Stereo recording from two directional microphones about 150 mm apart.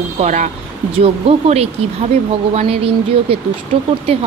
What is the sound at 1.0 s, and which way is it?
Speech, 40° right (ahead or behind).